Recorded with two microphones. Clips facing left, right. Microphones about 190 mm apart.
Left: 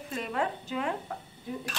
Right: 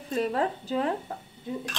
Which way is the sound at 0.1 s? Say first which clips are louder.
Right 5 dB; 35° right (ahead or behind).